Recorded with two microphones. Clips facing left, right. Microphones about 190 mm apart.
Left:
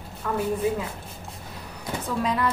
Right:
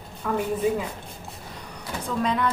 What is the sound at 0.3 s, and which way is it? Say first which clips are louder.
Speech: right 1 dB; 5° right (ahead or behind).